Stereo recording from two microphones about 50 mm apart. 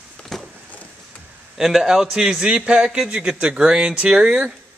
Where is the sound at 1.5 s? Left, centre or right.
Centre.